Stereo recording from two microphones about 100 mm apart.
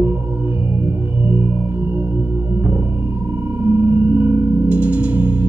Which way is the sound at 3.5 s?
20° right (ahead or behind).